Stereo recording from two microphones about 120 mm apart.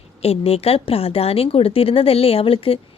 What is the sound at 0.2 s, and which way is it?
A woman's voice, 55° left (ahead or behind).